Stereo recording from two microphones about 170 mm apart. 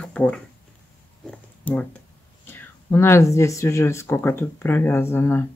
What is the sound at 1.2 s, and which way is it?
Oink, 5° left (ahead or behind).